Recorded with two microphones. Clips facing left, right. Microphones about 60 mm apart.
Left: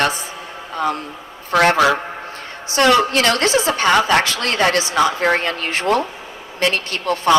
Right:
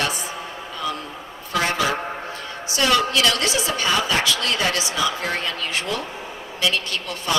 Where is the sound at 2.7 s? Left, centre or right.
Left.